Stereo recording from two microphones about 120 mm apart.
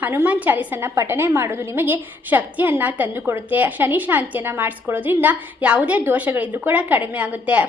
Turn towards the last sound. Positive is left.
turn(degrees=-10)  # may be behind; listen again after turning